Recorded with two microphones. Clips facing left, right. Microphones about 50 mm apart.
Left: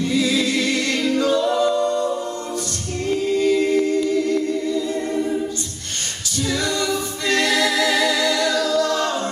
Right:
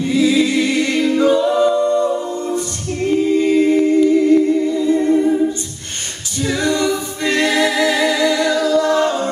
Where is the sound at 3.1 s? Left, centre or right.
Right.